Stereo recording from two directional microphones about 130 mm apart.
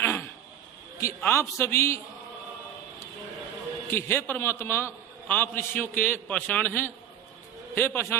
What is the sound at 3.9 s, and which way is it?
A man's voice, 20° left (ahead or behind).